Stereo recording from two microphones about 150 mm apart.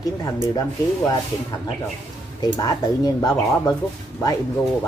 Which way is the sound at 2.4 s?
25° left (ahead or behind).